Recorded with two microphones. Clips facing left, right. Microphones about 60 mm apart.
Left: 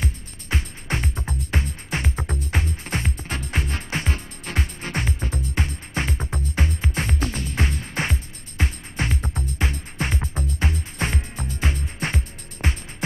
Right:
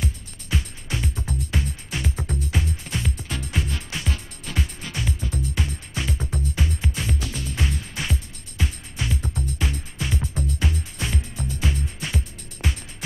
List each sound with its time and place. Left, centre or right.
0.0 s music: left